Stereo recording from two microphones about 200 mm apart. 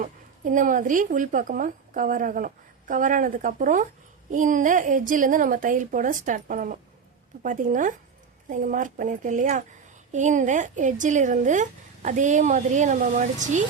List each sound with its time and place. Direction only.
0.0 s speech: 40° right (ahead or behind)